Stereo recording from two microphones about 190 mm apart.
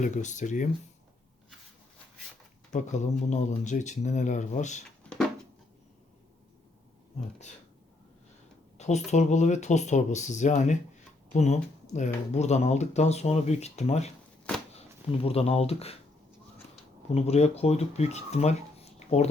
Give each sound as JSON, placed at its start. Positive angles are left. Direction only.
{"t": 0.0, "sound": "speech", "side_deg": 40}
{"t": 2.7, "sound": "speech", "side_deg": 40}
{"t": 5.0, "sound": "a sound", "side_deg": 5}
{"t": 8.8, "sound": "speech", "side_deg": 35}
{"t": 17.2, "sound": "speech", "side_deg": 35}